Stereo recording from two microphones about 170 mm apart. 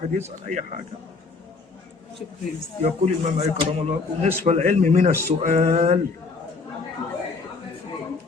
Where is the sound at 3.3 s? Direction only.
40° right (ahead or behind).